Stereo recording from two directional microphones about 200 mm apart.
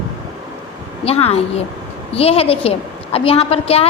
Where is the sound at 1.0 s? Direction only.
30° left (ahead or behind).